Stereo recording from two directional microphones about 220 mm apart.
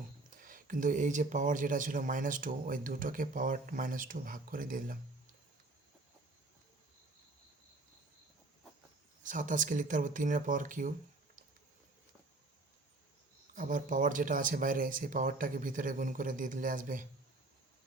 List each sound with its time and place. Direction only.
0.3 s speech: 40° right (ahead or behind)
9.2 s speech: 35° right (ahead or behind)
13.6 s speech: 35° right (ahead or behind)